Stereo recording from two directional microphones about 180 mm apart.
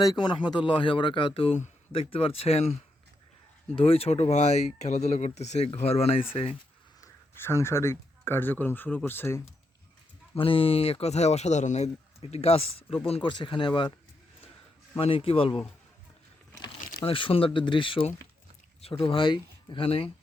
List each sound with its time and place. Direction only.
0.0 s speech: 25° left (ahead or behind)
3.8 s speech: 35° left (ahead or behind)
7.0 s speech: 15° left (ahead or behind)
10.3 s speech: 30° left (ahead or behind)
14.9 s speech: 30° left (ahead or behind)
17.1 s speech: 30° left (ahead or behind)